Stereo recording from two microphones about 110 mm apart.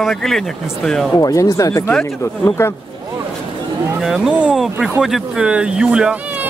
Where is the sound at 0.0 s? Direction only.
5° left (ahead or behind).